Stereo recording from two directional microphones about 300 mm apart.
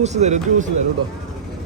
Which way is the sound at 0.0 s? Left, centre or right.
Right.